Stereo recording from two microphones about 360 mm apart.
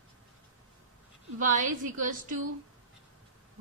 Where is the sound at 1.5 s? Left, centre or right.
Right.